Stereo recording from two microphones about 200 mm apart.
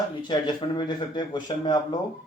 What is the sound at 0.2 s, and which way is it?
Speech, 25° left (ahead or behind).